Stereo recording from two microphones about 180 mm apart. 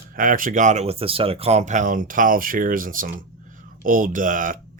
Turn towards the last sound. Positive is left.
turn(degrees=-45)  # may be behind; listen again after turning